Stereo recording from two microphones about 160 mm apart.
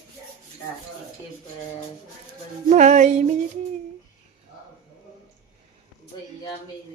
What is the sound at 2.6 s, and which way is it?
Music, 50° right (ahead or behind).